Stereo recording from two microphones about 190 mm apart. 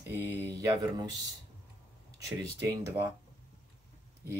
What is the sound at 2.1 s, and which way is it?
Speech, 20° right (ahead or behind).